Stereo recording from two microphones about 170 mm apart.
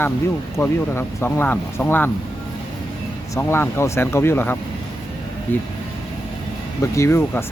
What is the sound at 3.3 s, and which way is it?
Speech, 15° left (ahead or behind).